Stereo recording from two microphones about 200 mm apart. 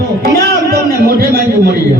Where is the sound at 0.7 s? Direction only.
50° right (ahead or behind).